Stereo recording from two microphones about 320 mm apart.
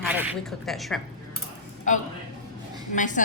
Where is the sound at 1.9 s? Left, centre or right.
Left.